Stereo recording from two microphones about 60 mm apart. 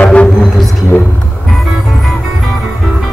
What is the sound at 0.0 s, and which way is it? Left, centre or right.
Didgeridoo, centre.